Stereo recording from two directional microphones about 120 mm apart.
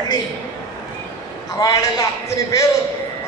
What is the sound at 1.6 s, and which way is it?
A man's voice, 30° left (ahead or behind).